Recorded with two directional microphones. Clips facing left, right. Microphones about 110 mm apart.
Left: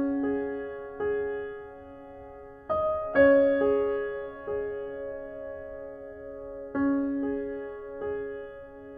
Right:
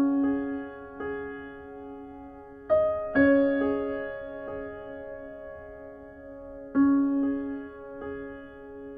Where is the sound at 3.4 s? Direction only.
20° right (ahead or behind).